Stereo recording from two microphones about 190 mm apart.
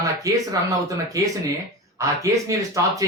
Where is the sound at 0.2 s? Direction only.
15° right (ahead or behind).